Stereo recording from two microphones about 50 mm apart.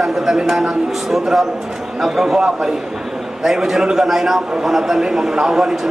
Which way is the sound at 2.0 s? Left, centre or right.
Centre.